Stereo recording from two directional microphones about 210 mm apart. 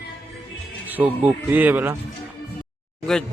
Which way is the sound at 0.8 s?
10° right (ahead or behind).